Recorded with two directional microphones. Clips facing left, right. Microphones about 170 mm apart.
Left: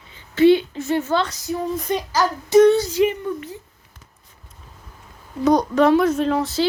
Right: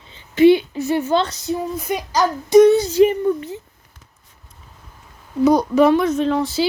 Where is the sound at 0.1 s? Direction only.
15° right (ahead or behind).